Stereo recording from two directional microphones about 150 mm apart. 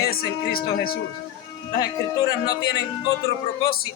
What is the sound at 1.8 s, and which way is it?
Speech, 25° left (ahead or behind).